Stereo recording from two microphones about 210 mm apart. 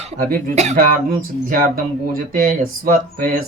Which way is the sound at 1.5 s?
40° right (ahead or behind).